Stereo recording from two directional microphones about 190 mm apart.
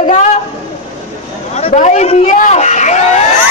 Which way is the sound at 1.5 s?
35° left (ahead or behind).